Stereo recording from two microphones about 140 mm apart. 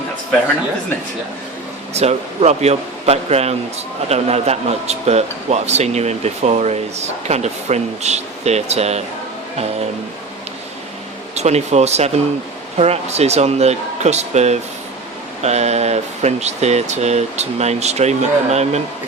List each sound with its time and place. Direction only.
1.9 s speech: 50° right (ahead or behind)
11.3 s speech: 50° right (ahead or behind)